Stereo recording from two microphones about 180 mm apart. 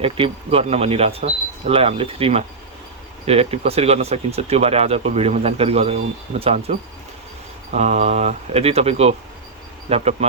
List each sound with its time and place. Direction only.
0.0 s speech: 35° right (ahead or behind)